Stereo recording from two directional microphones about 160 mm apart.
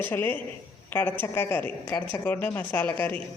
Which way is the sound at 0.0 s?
15° left (ahead or behind).